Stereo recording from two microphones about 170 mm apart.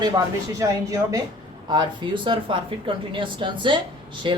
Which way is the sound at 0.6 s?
20° right (ahead or behind).